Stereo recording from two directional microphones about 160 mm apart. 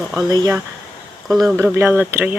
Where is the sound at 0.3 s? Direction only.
25° right (ahead or behind).